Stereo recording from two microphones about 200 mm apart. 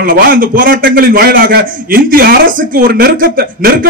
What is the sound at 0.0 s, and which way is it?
Speech, 45° right (ahead or behind).